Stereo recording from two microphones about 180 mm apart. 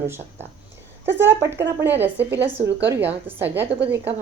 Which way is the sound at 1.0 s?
10° right (ahead or behind).